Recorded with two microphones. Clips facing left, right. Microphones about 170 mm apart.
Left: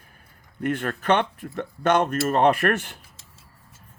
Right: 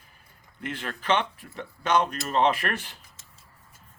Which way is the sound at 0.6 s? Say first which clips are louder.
Left 9 dB; 50° left (ahead or behind).